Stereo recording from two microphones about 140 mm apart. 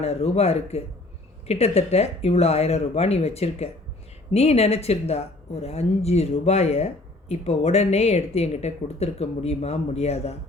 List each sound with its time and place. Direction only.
0.0 s speech: 45° left (ahead or behind)